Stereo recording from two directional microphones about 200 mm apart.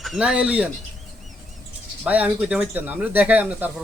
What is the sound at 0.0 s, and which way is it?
Speech, centre (ahead or behind).